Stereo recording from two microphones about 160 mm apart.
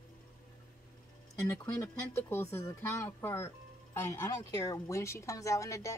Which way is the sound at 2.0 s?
15° left (ahead or behind).